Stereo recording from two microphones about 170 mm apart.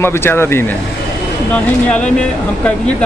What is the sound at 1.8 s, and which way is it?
Speech, 5° left (ahead or behind).